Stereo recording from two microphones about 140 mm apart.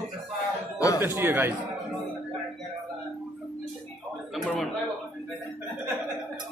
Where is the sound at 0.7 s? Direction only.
25° left (ahead or behind).